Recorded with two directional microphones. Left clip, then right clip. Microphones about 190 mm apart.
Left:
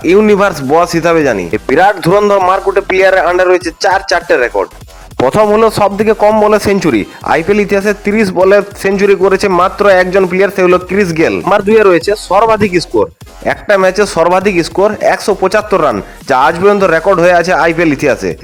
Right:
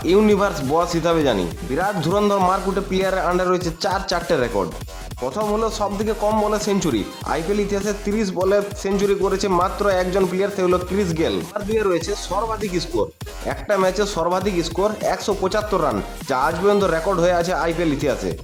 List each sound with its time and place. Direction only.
0.3 s speech: 30° left (ahead or behind)